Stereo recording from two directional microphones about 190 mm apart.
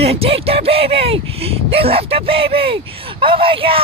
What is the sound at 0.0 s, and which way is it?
Speech, 30° right (ahead or behind).